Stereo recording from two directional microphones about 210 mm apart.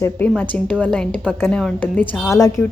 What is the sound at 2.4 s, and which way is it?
Speech, 15° left (ahead or behind).